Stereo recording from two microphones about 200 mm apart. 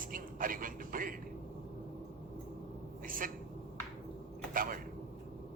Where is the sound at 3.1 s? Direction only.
45° right (ahead or behind).